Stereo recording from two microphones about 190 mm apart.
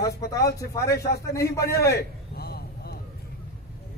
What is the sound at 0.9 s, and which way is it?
Speech, 55° left (ahead or behind).